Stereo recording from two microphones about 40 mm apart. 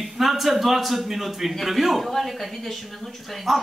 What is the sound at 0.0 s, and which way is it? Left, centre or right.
A man's voice, centre.